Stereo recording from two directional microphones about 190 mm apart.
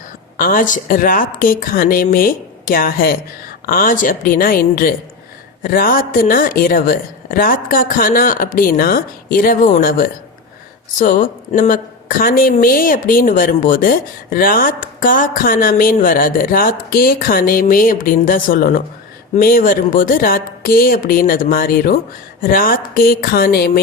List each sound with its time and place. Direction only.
0.3 s a woman's voice: 45° left (ahead or behind)